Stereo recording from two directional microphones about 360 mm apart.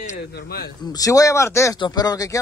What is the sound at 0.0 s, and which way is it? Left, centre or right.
Speech, left.